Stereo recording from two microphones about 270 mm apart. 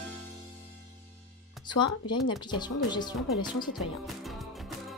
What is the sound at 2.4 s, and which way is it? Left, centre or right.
Speech, centre.